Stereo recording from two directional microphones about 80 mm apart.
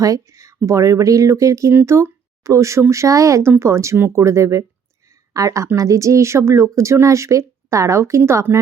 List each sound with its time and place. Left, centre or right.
0.0 s speech: right